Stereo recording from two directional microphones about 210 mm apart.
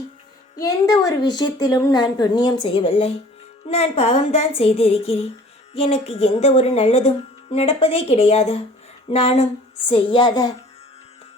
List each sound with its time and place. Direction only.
0.6 s a woman's voice: 15° left (ahead or behind)